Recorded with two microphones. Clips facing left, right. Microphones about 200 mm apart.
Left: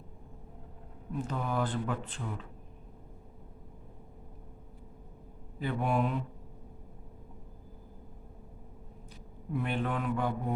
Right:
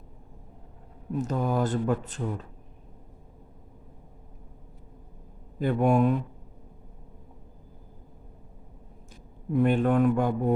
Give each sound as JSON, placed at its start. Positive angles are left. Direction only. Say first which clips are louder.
{"t": 1.2, "sound": "speech", "louder": "right 6 dB", "side_deg": -40}
{"t": 5.5, "sound": "speech", "louder": "right 8 dB", "side_deg": -45}
{"t": 9.5, "sound": "speech", "louder": "right 10 dB", "side_deg": -45}